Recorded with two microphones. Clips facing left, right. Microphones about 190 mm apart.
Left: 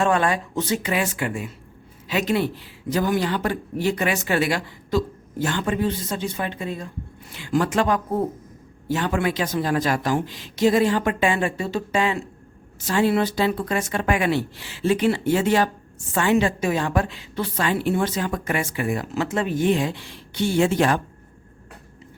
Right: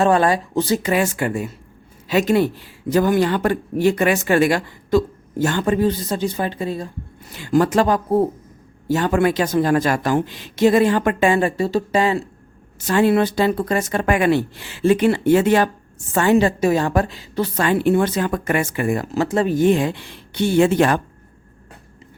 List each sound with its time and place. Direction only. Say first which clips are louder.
0.0 s a woman's voice: right 5 dB; 35° right (ahead or behind)
8.9 s a woman's voice: right 6 dB; 45° right (ahead or behind)
12.8 s a woman's voice: right 4 dB; 55° right (ahead or behind)
16.1 s a woman's voice: right 4 dB; 40° right (ahead or behind); by 21.0 s 60° right (ahead or behind)